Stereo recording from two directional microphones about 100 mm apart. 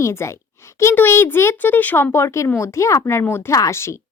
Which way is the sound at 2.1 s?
30° left (ahead or behind).